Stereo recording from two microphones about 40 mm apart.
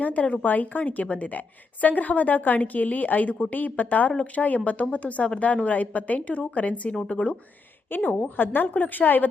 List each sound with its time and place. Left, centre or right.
0.0 s a woman's voice: left
7.9 s a woman's voice: left